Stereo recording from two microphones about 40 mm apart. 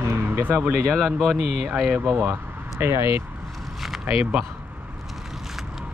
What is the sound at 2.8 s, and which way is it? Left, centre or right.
Speech, right.